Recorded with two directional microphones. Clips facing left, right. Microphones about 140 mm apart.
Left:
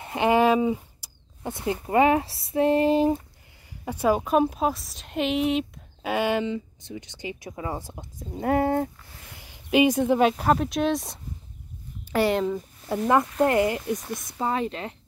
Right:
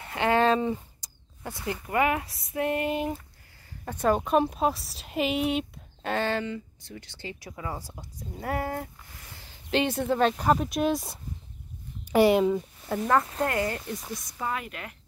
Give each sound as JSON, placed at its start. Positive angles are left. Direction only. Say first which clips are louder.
{"t": 0.0, "sound": "a sound", "louder": "left 3 dB", "side_deg": 20}
{"t": 1.4, "sound": "speech", "louder": "left 5 dB", "side_deg": 20}
{"t": 3.8, "sound": "speech", "louder": "left 2 dB", "side_deg": 10}
{"t": 6.1, "sound": "speech", "louder": "left 4 dB", "side_deg": 15}
{"t": 9.4, "sound": "speech", "louder": "left 6 dB", "side_deg": 10}
{"t": 12.0, "sound": "speech", "louder": "right 3 dB", "side_deg": -15}
{"t": 12.5, "sound": "speech", "louder": "left 1 dB", "side_deg": 5}
{"t": 13.4, "sound": "speech", "louder": "left 6 dB", "side_deg": 20}
{"t": 14.4, "sound": "speech", "louder": "left 7 dB", "side_deg": 30}